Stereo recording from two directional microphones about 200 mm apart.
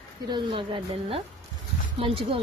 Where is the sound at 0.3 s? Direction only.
25° right (ahead or behind).